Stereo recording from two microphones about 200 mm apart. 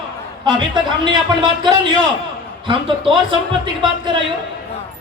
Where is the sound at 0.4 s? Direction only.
25° right (ahead or behind).